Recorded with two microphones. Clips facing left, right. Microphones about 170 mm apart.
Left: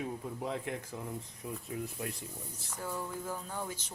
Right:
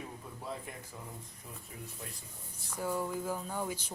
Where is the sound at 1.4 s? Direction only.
75° left (ahead or behind).